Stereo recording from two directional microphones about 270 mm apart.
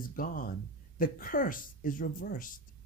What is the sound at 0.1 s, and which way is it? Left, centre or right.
Speech, left.